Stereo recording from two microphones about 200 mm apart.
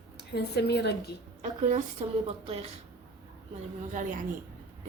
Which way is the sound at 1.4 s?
35° right (ahead or behind).